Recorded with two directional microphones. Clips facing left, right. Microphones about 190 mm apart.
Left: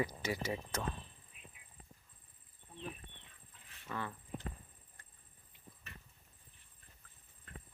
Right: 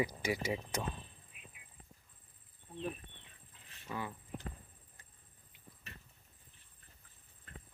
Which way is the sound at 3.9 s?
15° right (ahead or behind).